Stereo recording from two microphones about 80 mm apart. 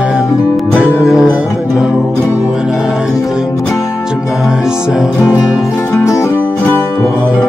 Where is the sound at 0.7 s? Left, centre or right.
Centre.